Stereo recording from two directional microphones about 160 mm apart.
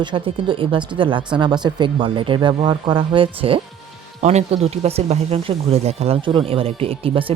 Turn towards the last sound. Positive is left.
turn(degrees=-35)  # may be behind; listen again after turning